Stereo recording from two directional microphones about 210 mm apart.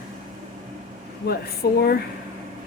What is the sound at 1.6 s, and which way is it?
Speech, 50° left (ahead or behind).